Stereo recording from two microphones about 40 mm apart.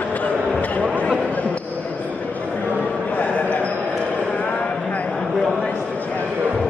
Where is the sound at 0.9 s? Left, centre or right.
Left.